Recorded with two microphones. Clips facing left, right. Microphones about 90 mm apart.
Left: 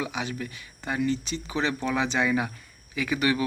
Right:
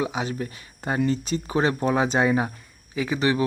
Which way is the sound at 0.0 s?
40° right (ahead or behind).